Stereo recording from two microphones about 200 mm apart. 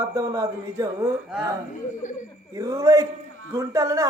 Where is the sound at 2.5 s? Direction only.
15° right (ahead or behind).